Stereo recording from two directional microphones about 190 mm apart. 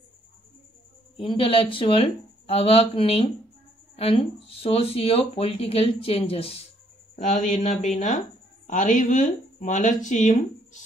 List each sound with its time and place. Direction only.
1.2 s speech: 30° left (ahead or behind)